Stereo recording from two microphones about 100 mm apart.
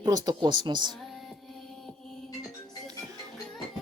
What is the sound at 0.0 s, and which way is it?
Speech, 40° right (ahead or behind).